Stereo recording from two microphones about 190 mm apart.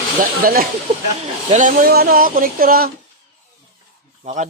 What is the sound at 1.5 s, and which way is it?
Speech, 40° right (ahead or behind).